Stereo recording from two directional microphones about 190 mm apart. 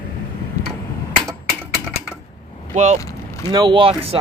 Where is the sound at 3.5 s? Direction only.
25° right (ahead or behind).